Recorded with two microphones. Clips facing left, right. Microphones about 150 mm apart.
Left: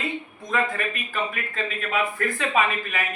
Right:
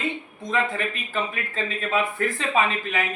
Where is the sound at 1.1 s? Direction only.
30° right (ahead or behind).